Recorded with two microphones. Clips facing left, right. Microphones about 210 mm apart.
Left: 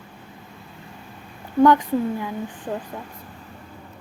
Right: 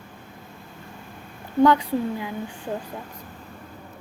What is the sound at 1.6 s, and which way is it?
Speech, 10° right (ahead or behind).